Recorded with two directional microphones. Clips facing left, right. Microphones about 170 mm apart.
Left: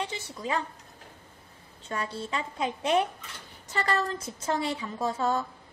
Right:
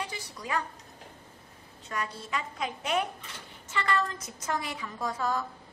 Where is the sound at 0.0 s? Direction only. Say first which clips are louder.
Left 4 dB; 25° left (ahead or behind).